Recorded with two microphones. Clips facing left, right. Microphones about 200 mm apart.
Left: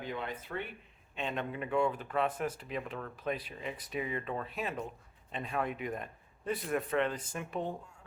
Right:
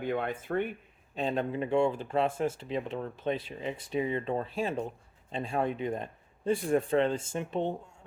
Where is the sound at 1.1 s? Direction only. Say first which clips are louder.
Right 6 dB; 35° right (ahead or behind).